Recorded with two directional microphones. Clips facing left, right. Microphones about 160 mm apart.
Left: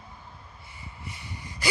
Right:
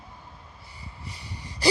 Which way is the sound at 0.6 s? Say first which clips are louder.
Even; 35° right (ahead or behind).